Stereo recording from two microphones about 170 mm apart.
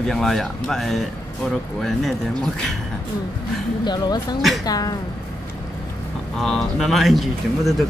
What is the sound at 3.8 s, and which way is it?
Speech, 25° left (ahead or behind).